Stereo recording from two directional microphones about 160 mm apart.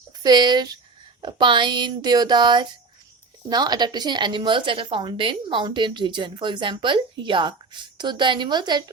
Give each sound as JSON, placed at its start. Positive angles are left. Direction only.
{"t": 0.2, "sound": "a woman's voice", "side_deg": -25}